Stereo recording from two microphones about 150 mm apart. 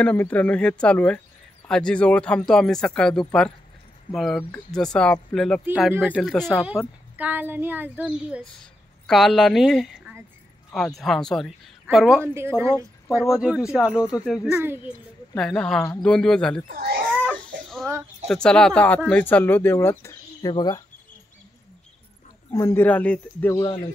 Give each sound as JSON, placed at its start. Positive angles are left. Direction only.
{"t": 0.0, "sound": "speech", "side_deg": 10}
{"t": 6.3, "sound": "speech", "side_deg": 5}
{"t": 6.6, "sound": "speech", "side_deg": -10}
{"t": 12.4, "sound": "speech", "side_deg": -15}
{"t": 13.1, "sound": "speech", "side_deg": 0}
{"t": 14.5, "sound": "speech", "side_deg": -15}
{"t": 15.3, "sound": "speech", "side_deg": 5}
{"t": 16.6, "sound": "a child's voice", "side_deg": -85}
{"t": 17.6, "sound": "a sound", "side_deg": 0}
{"t": 18.2, "sound": "speech", "side_deg": 5}
{"t": 22.5, "sound": "speech", "side_deg": 20}
{"t": 23.5, "sound": "speech", "side_deg": 25}